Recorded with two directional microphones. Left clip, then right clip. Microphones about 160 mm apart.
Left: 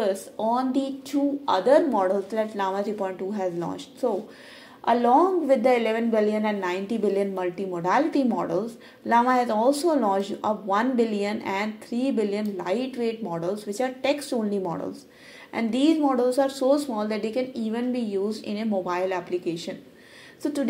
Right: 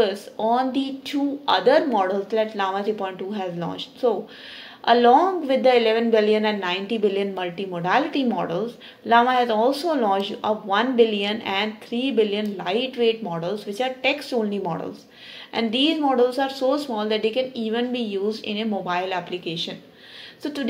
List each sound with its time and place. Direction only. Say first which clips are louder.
0.0 s a woman's voice: right 3 dB; 35° left (ahead or behind)